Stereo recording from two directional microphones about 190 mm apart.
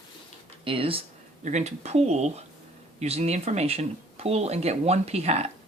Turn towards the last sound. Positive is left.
turn(degrees=-35)  # may be behind; listen again after turning